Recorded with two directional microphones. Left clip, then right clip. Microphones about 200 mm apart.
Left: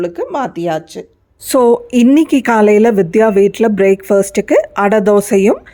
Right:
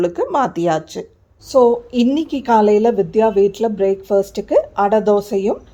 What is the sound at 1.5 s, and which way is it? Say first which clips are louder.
A woman's voice: left 3 dB; 35° left (ahead or behind).